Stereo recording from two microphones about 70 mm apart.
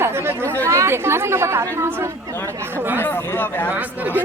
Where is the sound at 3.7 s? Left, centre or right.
Right.